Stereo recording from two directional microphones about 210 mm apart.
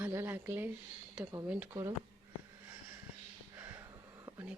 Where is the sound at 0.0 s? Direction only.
10° right (ahead or behind).